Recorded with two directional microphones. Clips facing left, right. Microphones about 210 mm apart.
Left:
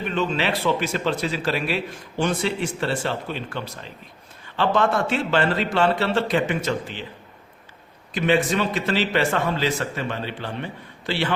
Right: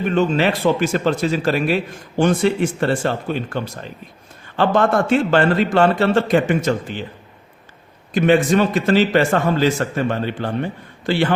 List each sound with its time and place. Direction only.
0.1 s a man's voice: 45° right (ahead or behind)
8.1 s a man's voice: 50° right (ahead or behind)